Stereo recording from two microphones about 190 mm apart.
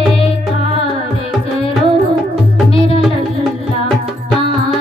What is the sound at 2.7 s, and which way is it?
Music, 30° left (ahead or behind).